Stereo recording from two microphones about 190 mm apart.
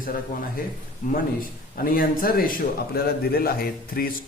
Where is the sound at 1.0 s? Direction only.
40° left (ahead or behind).